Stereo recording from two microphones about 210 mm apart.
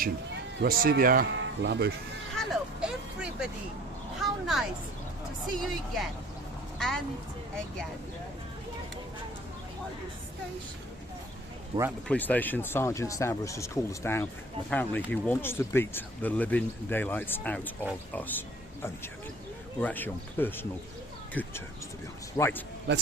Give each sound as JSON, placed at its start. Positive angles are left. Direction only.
{"t": 0.6, "sound": "speech", "side_deg": -45}
{"t": 1.3, "sound": "speech", "side_deg": -55}
{"t": 2.3, "sound": "a sound", "side_deg": 0}
{"t": 5.5, "sound": "speech", "side_deg": 0}
{"t": 12.0, "sound": "speech", "side_deg": 5}
{"t": 19.8, "sound": "speech", "side_deg": 10}
{"t": 22.9, "sound": "a man's voice", "side_deg": -55}